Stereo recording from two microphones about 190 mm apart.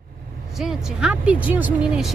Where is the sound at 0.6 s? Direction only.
5° right (ahead or behind).